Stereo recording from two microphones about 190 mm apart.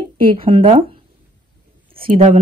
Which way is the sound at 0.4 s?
30° right (ahead or behind).